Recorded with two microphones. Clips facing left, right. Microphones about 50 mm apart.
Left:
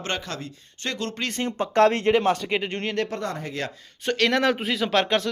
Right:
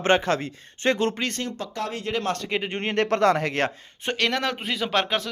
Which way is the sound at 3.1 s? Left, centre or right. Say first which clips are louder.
Right 10 dB; right.